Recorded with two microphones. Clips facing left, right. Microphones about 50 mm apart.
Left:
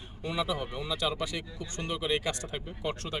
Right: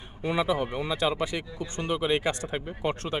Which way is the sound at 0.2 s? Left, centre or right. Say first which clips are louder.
Right 6 dB; right.